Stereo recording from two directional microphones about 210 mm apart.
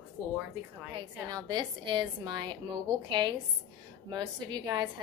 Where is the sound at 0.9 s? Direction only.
20° right (ahead or behind).